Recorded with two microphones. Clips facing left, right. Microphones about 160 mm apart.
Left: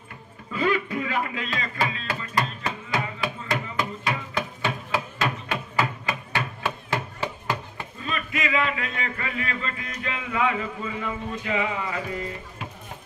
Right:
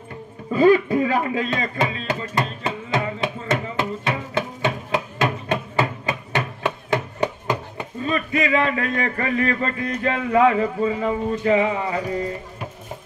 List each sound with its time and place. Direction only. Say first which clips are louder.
0.5 s speech: right 10 dB; 35° right (ahead or behind)
1.8 s music: right 5 dB; 20° right (ahead or behind)
8.0 s a man's voice: right 7 dB; 40° right (ahead or behind)